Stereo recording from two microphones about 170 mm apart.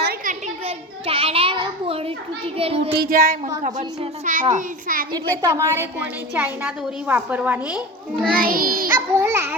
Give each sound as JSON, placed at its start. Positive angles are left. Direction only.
{"t": 0.0, "sound": "a sound", "side_deg": -65}
{"t": 0.4, "sound": "a child's voice", "side_deg": -35}
{"t": 2.6, "sound": "child singing", "side_deg": -35}
{"t": 2.9, "sound": "child singing", "side_deg": -65}
{"t": 3.6, "sound": "a child's voice", "side_deg": -45}
{"t": 4.5, "sound": "child singing", "side_deg": -55}
{"t": 5.1, "sound": "a woman's voice", "side_deg": -20}
{"t": 8.4, "sound": "child singing", "side_deg": -55}
{"t": 8.9, "sound": "a woman's voice", "side_deg": -15}